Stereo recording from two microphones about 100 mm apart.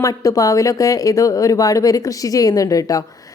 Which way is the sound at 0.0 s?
35° left (ahead or behind).